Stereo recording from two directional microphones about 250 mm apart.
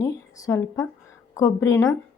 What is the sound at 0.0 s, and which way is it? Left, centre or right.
Speech, centre.